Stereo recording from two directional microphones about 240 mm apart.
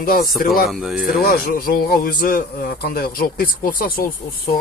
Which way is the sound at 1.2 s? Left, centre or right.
Left.